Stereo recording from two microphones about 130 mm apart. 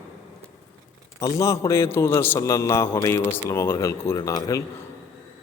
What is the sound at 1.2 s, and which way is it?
A man's voice, 25° left (ahead or behind).